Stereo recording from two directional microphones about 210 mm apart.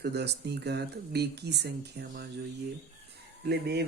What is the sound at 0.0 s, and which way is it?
Speech, 50° right (ahead or behind).